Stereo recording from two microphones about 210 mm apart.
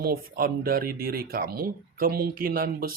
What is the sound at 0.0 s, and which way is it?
Speech, 45° right (ahead or behind).